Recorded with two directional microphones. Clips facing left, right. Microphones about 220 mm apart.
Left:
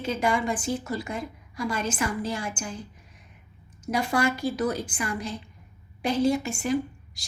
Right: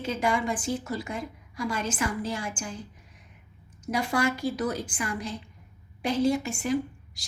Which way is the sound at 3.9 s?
30° left (ahead or behind).